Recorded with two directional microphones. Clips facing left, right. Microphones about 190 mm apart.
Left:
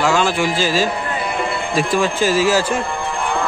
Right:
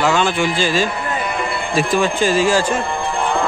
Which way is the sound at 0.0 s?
Centre (ahead or behind).